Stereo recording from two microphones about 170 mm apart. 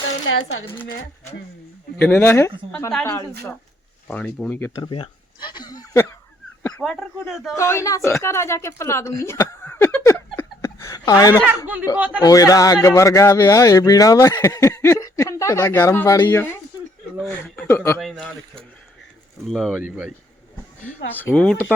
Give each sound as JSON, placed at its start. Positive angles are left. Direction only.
{"t": 2.0, "sound": "speech", "side_deg": 10}
{"t": 4.8, "sound": "speech", "side_deg": 30}
{"t": 6.6, "sound": "dog", "side_deg": 15}
{"t": 6.8, "sound": "speech", "side_deg": 0}
{"t": 7.5, "sound": "speech", "side_deg": 15}
{"t": 11.9, "sound": "speech", "side_deg": -10}
{"t": 12.2, "sound": "speech", "side_deg": 20}
{"t": 18.0, "sound": "speech", "side_deg": 0}
{"t": 19.5, "sound": "speech", "side_deg": 0}
{"t": 21.1, "sound": "speech", "side_deg": 10}